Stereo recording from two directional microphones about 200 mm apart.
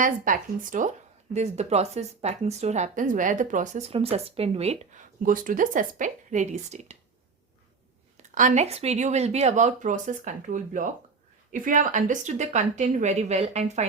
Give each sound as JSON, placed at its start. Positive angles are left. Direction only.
{"t": 0.0, "sound": "speech", "side_deg": -40}
{"t": 8.2, "sound": "speech", "side_deg": -40}